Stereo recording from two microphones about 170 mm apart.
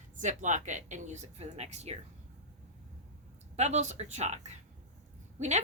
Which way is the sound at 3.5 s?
40° right (ahead or behind).